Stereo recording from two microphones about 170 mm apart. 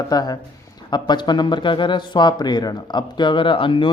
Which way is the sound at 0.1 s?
25° left (ahead or behind).